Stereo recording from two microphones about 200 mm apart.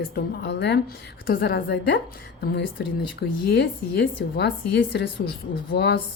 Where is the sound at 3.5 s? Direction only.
55° left (ahead or behind).